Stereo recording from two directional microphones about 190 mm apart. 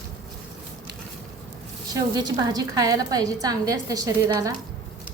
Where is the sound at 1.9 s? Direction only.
20° right (ahead or behind).